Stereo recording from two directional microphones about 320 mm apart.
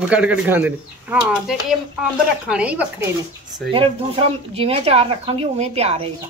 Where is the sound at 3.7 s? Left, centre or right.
Centre.